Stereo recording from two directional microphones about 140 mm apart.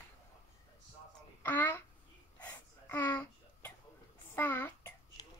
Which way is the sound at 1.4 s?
15° left (ahead or behind).